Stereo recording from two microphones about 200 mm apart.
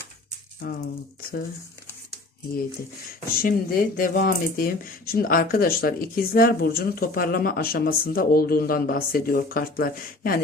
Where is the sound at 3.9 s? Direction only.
45° left (ahead or behind).